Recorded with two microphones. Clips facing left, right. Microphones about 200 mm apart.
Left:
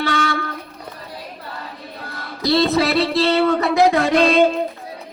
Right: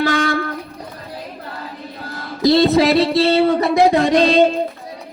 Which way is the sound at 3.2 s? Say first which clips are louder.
Right 2 dB; 20° right (ahead or behind).